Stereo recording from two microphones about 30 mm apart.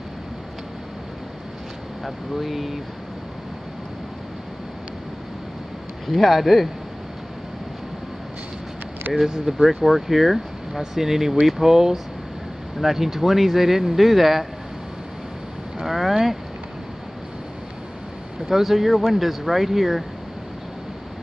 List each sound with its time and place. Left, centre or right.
2.0 s speech: centre
6.0 s speech: centre
9.3 s speech: centre
11.7 s speech: centre
15.8 s speech: centre
18.5 s speech: centre